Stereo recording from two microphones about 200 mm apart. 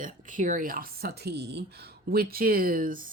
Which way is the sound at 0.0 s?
40° right (ahead or behind).